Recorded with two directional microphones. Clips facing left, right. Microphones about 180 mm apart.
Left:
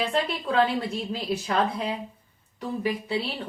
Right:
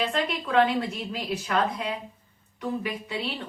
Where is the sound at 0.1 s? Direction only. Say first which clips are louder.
Even; 30° left (ahead or behind).